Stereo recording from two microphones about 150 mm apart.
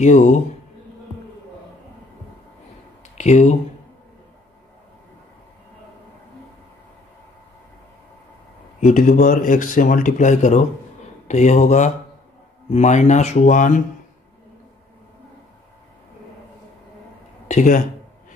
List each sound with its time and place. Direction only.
0.0 s speech: 50° left (ahead or behind)
3.2 s speech: 50° left (ahead or behind)
8.8 s speech: 60° left (ahead or behind)
17.5 s speech: 55° left (ahead or behind)